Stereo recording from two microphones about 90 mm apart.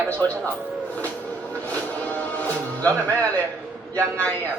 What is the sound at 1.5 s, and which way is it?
Music, 15° left (ahead or behind).